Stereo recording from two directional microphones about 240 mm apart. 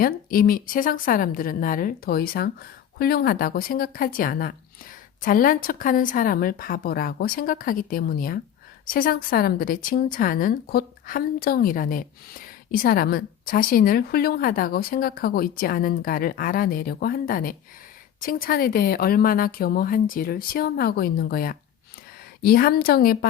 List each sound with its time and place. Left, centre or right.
0.0 s a woman's voice: left